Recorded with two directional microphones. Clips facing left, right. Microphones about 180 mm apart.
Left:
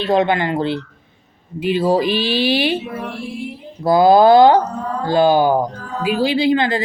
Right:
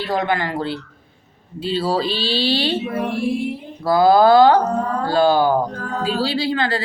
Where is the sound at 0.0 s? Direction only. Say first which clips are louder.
Left 5 dB; 20° left (ahead or behind).